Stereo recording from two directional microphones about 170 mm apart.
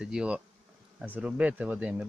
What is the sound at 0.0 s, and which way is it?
Bee, 5° right (ahead or behind).